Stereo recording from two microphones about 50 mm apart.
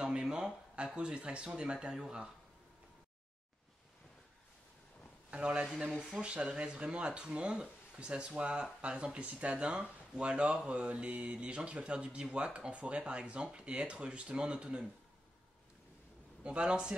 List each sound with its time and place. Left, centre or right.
0.0 s speech: centre
5.3 s speech: right
16.4 s speech: right